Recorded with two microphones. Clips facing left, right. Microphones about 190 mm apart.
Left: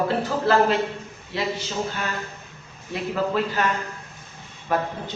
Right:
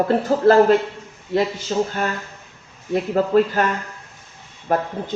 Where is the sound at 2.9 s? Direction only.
50° right (ahead or behind).